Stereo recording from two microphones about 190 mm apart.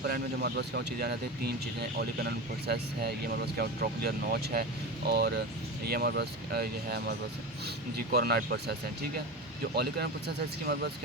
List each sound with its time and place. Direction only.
0.0 s speech: 60° right (ahead or behind)
9.7 s speech: 60° right (ahead or behind)